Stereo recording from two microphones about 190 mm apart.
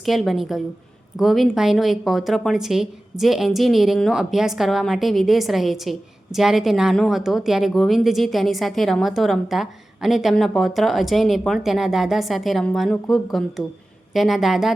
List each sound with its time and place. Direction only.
0.0 s a woman's voice: centre (ahead or behind)